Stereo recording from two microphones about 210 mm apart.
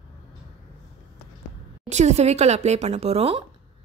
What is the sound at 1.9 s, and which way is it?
A woman's voice, 35° right (ahead or behind).